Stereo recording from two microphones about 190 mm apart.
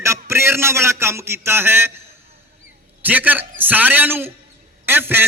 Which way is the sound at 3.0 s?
10° right (ahead or behind).